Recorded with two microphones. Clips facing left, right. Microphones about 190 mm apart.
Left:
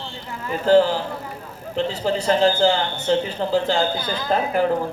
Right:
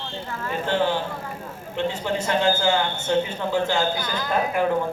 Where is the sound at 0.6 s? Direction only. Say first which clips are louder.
Left 8 dB; 35° left (ahead or behind).